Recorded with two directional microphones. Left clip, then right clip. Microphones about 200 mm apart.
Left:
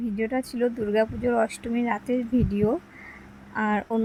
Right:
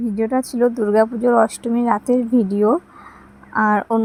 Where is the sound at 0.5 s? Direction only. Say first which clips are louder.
Right 9 dB; 25° right (ahead or behind).